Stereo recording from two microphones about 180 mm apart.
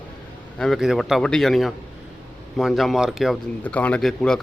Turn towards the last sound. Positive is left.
turn(degrees=0)  # may be behind; listen again after turning